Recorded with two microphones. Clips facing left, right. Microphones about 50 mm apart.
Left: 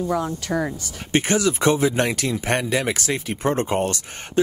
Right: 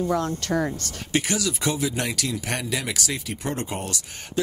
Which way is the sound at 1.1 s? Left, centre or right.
Left.